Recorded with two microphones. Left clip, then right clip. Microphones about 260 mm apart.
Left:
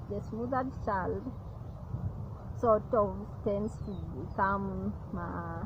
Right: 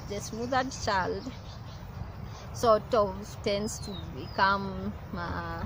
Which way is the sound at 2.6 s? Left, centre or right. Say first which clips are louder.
Right 3 dB; centre.